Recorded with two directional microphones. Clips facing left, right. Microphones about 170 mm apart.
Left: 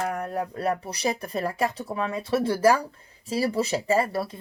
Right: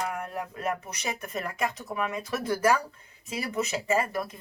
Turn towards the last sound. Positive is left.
turn(degrees=30)  # may be behind; listen again after turning